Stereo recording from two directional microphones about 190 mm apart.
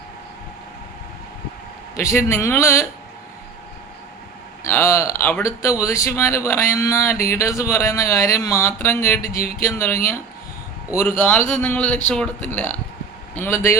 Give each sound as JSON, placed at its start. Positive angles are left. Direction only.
{"t": 2.0, "sound": "speech", "side_deg": 15}
{"t": 4.6, "sound": "speech", "side_deg": 15}
{"t": 9.2, "sound": "music", "side_deg": 50}
{"t": 9.6, "sound": "speech", "side_deg": 15}
{"t": 11.3, "sound": "speech", "side_deg": 10}